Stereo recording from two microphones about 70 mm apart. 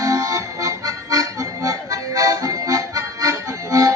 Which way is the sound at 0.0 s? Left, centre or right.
Right.